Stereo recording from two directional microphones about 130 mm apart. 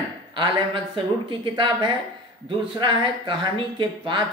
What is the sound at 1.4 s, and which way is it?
Speech, 40° right (ahead or behind).